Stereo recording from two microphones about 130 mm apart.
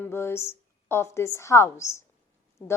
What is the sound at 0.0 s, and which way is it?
A woman's voice, 20° left (ahead or behind).